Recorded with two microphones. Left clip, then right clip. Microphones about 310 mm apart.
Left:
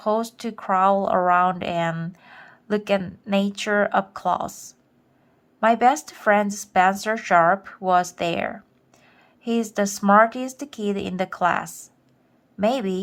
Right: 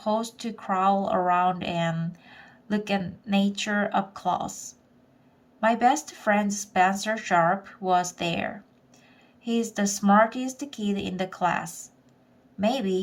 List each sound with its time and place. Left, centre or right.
0.0 s speech: centre